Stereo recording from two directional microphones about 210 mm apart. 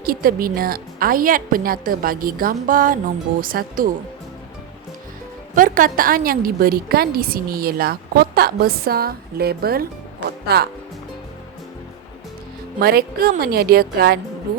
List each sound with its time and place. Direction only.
0.0 s a woman's voice: 45° right (ahead or behind)
5.5 s a woman's voice: 40° right (ahead or behind)
12.8 s a woman's voice: 45° right (ahead or behind)